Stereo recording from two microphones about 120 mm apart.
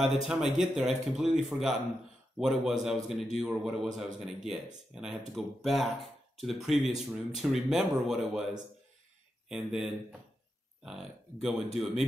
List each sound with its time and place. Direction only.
0.0 s a man's voice: centre (ahead or behind)
9.5 s a man's voice: 5° right (ahead or behind)